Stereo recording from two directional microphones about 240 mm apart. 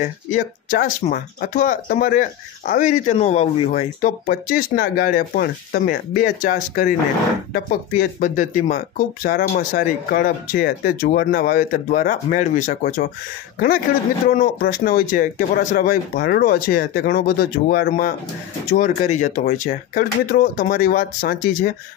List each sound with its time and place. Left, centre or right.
0.3 s speech: left
14.2 s speech: left